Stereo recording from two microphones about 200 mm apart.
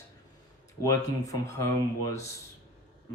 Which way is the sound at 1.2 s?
15° left (ahead or behind).